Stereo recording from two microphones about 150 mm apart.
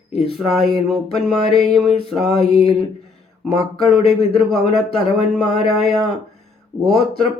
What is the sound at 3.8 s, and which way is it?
A man's voice, centre (ahead or behind).